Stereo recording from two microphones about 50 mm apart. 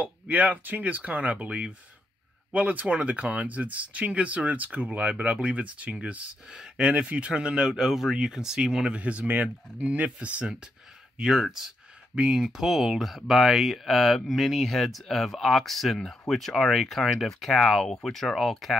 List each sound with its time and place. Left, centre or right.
0.0 s speech: right
12.2 s speech: centre